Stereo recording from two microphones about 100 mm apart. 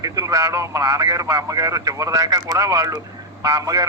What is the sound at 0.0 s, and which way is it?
A man's voice, 35° right (ahead or behind).